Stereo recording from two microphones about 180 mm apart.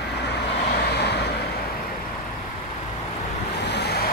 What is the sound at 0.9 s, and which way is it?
Vehicle, 65° left (ahead or behind).